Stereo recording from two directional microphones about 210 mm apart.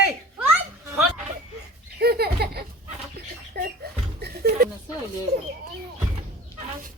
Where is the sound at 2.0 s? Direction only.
50° right (ahead or behind).